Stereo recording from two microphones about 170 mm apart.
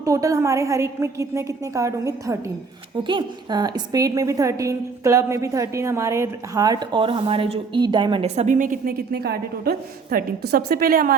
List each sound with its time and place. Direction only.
0.0 s a woman's voice: 20° right (ahead or behind); by 11.1 s 60° right (ahead or behind)